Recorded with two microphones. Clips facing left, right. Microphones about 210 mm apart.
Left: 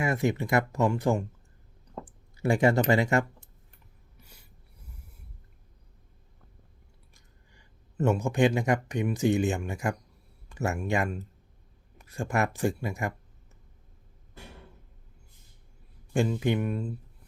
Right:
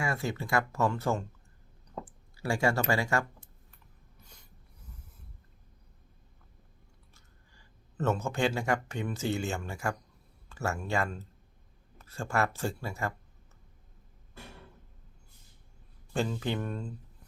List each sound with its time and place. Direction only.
0.0 s speech: 20° left (ahead or behind)
4.2 s writing: 10° left (ahead or behind)
7.1 s speech: 15° left (ahead or behind)
16.1 s speech: 15° left (ahead or behind)